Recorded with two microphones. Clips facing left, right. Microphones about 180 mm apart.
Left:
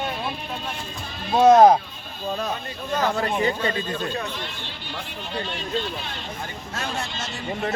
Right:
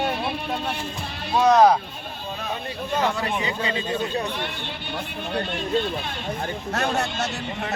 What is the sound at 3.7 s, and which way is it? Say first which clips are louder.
Speech: right 2 dB; 15° right (ahead or behind).